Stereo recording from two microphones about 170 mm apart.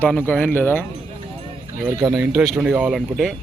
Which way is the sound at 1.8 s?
10° right (ahead or behind).